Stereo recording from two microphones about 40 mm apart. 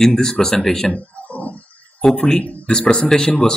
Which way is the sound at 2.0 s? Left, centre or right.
Centre.